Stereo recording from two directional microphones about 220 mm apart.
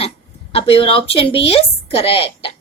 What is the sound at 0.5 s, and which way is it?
A woman's voice, 25° left (ahead or behind).